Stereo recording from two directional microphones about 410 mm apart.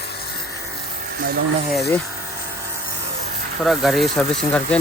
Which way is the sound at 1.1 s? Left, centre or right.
Right.